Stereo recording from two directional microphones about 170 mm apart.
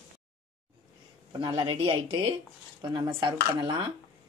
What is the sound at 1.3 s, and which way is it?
Speech, 25° right (ahead or behind).